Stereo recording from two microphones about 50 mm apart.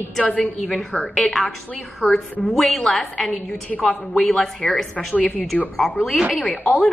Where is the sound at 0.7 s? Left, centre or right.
Centre.